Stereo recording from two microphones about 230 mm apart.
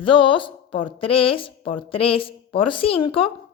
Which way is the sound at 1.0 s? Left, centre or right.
Left.